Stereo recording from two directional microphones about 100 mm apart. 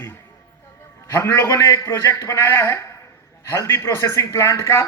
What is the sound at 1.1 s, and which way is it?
Speech, 25° left (ahead or behind).